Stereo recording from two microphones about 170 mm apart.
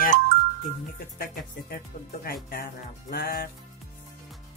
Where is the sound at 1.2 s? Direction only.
60° left (ahead or behind).